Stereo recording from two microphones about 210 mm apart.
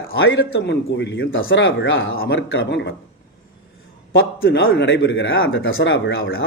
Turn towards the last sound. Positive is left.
turn(degrees=65)  # may be behind; listen again after turning